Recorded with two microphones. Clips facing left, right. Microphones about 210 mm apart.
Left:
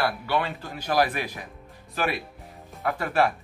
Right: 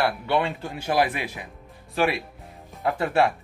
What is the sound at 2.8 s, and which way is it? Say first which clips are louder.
Speech: right 2 dB; 25° right (ahead or behind).